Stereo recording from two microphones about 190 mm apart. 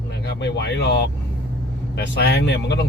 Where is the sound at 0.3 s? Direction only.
65° left (ahead or behind).